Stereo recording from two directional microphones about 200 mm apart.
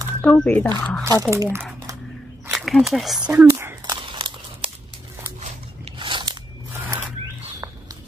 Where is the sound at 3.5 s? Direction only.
15° right (ahead or behind).